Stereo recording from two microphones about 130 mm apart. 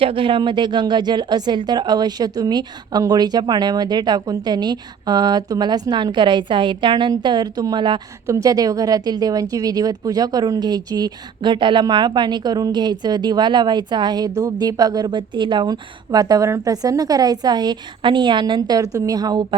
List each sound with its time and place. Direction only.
0.0 s a woman's voice: 45° right (ahead or behind)